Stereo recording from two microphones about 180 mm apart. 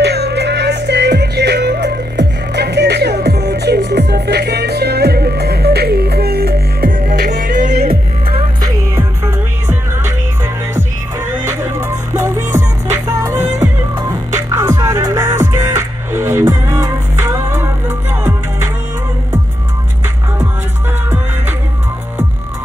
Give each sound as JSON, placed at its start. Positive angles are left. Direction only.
{"t": 0.0, "sound": "music", "side_deg": -70}
{"t": 7.9, "sound": "music", "side_deg": -30}
{"t": 8.6, "sound": "music", "side_deg": -15}
{"t": 11.4, "sound": "music", "side_deg": -15}